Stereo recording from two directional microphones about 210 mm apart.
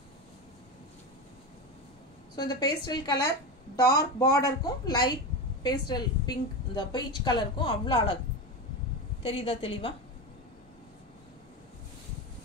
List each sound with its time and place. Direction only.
2.3 s a woman's voice: 20° left (ahead or behind)
9.2 s a woman's voice: 25° left (ahead or behind)